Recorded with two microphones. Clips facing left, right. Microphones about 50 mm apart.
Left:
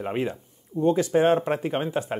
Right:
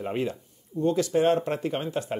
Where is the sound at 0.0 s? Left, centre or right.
Left.